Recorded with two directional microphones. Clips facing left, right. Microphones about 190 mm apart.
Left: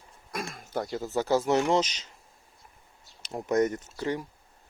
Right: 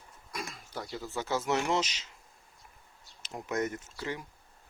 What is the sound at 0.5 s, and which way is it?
Speech, 50° left (ahead or behind).